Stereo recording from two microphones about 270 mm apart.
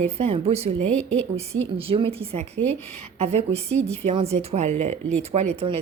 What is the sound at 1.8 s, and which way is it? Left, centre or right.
Speech, right.